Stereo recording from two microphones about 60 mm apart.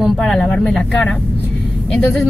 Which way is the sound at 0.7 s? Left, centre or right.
Centre.